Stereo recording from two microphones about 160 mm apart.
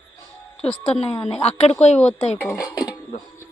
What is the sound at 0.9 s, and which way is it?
Speech, 40° left (ahead or behind).